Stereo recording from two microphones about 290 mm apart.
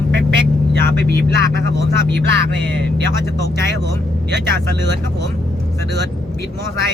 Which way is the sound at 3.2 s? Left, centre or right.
Left.